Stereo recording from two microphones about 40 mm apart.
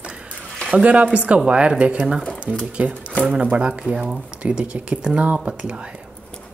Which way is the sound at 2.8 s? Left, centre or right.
Right.